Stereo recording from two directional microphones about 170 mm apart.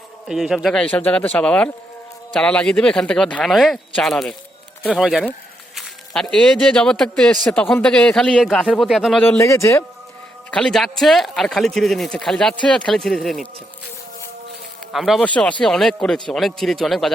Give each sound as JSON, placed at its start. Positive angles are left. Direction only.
{"t": 0.3, "sound": "a man's voice", "side_deg": 0}
{"t": 9.2, "sound": "a man's voice", "side_deg": 15}
{"t": 10.5, "sound": "speech", "side_deg": 5}
{"t": 14.9, "sound": "speech", "side_deg": 0}